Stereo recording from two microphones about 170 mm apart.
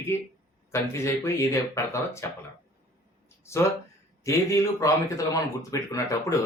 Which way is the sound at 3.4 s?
15° left (ahead or behind).